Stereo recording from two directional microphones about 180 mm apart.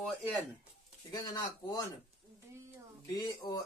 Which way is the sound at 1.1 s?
20° left (ahead or behind).